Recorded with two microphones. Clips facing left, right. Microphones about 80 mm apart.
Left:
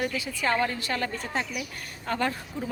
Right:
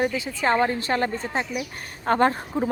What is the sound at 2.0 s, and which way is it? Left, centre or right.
Speech, right.